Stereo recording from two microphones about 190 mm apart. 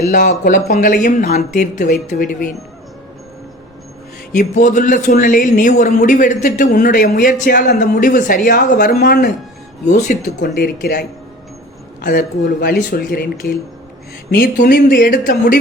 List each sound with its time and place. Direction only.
0.1 s speech: 40° left (ahead or behind)
4.3 s speech: 40° left (ahead or behind)
9.8 s speech: 40° left (ahead or behind)
10.5 s speech: 55° left (ahead or behind)
12.0 s speech: 45° left (ahead or behind)